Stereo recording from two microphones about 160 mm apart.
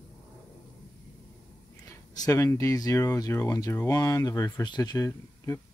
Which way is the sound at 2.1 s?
20° left (ahead or behind).